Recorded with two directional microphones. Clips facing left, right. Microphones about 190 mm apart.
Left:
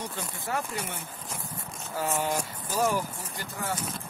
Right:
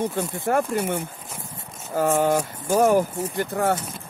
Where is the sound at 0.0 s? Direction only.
50° right (ahead or behind).